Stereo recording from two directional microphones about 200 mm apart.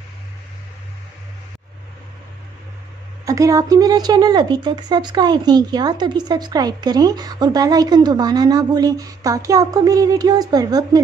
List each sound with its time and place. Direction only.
3.3 s speech: 15° right (ahead or behind)